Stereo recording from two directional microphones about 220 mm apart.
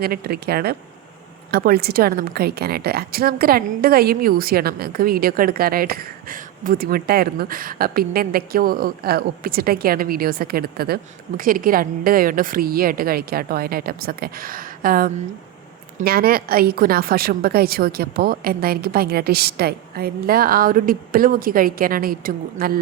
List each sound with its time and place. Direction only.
0.0 s a woman's voice: 45° right (ahead or behind)